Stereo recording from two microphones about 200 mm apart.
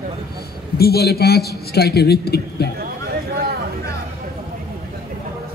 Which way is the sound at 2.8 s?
50° right (ahead or behind).